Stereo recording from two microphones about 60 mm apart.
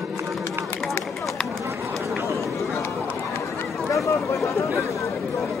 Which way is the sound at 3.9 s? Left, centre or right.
Left.